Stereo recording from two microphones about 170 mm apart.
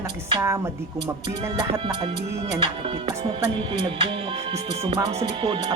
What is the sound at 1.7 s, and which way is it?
Music, 30° right (ahead or behind).